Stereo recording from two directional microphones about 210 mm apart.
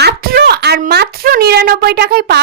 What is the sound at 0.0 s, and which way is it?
A woman's voice, 50° right (ahead or behind).